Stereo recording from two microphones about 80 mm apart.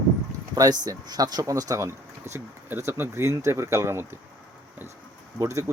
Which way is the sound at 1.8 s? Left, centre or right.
Right.